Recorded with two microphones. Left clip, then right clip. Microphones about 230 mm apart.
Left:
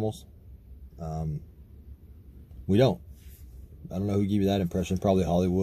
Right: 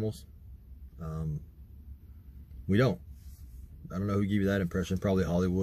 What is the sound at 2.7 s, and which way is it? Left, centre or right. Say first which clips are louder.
Speech: left 5 dB; left.